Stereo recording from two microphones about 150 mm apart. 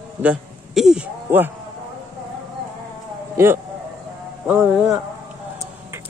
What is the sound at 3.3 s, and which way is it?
A man's voice, 15° right (ahead or behind).